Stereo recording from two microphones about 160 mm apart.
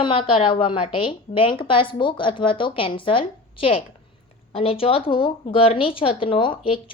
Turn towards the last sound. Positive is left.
turn(degrees=35)  # may be behind; listen again after turning